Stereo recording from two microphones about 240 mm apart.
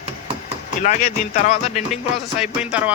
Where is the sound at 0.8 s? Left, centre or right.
Left.